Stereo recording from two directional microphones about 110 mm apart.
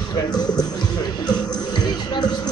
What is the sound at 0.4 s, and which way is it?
Music, 40° left (ahead or behind).